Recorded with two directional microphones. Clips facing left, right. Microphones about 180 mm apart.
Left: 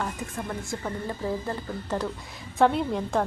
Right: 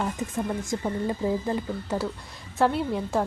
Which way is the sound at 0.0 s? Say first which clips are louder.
Right 4 dB; 20° right (ahead or behind).